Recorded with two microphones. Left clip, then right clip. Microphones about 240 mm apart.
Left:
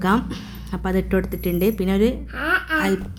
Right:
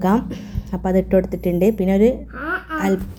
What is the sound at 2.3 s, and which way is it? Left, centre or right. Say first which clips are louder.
Speech: left 4 dB; left.